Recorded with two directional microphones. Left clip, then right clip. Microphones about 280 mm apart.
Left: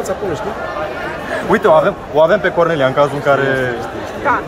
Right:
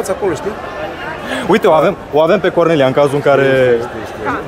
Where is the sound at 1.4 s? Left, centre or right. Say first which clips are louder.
Right 1 dB; right.